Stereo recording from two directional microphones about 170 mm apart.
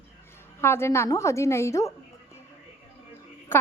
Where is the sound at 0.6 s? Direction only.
15° left (ahead or behind).